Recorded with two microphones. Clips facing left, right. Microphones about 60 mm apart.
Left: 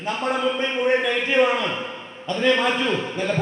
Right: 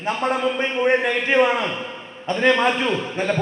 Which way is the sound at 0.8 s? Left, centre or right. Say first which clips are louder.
Right 2 dB; right.